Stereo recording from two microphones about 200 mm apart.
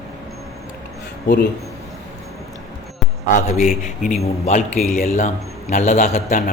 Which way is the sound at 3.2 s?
40° left (ahead or behind).